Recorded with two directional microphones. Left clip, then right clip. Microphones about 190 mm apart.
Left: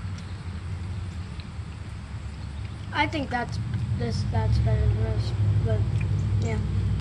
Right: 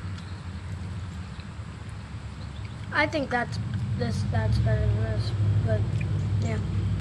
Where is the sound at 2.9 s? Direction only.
25° right (ahead or behind).